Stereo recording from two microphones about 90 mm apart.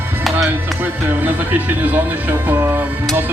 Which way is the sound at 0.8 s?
20° right (ahead or behind).